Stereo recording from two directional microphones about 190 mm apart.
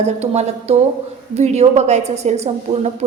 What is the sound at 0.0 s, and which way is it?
A woman's voice, 35° right (ahead or behind).